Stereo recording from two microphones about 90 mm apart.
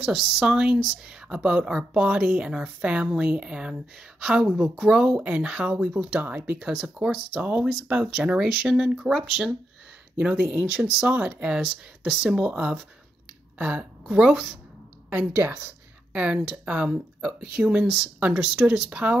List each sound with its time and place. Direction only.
0.0 s speech: 5° right (ahead or behind)
15.3 s a woman's voice: 25° right (ahead or behind)
16.1 s speech: 15° right (ahead or behind)